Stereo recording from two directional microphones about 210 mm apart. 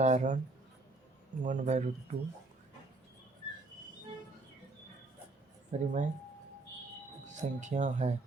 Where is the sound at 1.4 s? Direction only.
35° right (ahead or behind).